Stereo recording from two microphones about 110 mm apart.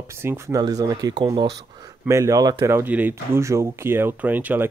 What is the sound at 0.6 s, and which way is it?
Speech, 35° right (ahead or behind).